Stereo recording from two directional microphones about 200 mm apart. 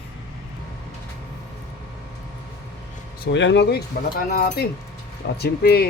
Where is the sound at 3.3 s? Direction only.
65° left (ahead or behind).